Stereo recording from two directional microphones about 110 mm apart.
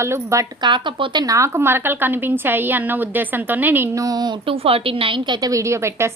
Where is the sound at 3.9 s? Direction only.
35° right (ahead or behind).